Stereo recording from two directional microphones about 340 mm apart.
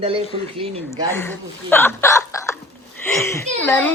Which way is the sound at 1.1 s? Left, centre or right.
Centre.